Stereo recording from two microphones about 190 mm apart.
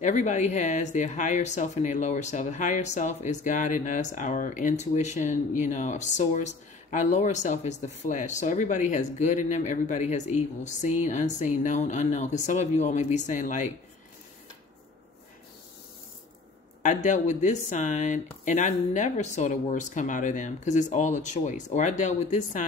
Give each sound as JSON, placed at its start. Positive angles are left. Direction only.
{"t": 0.0, "sound": "speech", "side_deg": 40}
{"t": 16.8, "sound": "speech", "side_deg": 40}